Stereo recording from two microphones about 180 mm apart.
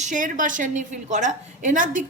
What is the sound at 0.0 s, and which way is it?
A woman's voice, 45° right (ahead or behind).